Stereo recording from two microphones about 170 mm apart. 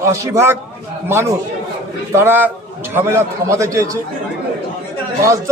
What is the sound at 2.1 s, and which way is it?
A man's voice, 15° right (ahead or behind).